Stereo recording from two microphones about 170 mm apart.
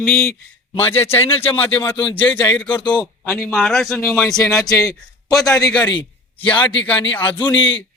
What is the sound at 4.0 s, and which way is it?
A man's voice, 15° left (ahead or behind).